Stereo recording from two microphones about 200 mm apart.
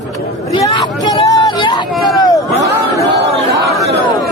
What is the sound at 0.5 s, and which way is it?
Hubbub, 20° left (ahead or behind).